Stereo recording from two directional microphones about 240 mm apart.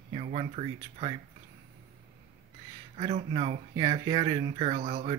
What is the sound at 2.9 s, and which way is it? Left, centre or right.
Speech, right.